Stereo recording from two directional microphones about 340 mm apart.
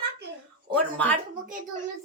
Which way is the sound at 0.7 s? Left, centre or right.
Centre.